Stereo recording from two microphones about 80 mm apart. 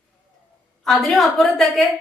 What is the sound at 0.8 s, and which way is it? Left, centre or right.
A woman's voice, centre.